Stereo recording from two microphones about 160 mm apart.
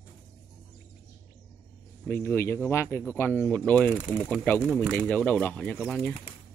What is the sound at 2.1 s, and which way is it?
Speech, 15° left (ahead or behind).